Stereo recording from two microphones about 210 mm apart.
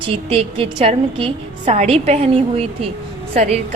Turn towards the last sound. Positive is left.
turn(degrees=-30)  # may be behind; listen again after turning